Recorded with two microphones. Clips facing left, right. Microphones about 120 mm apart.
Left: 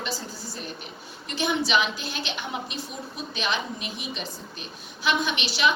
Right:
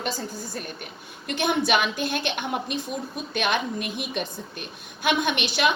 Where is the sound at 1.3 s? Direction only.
55° right (ahead or behind).